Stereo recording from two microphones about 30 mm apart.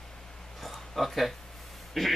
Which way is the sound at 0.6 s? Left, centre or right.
Centre.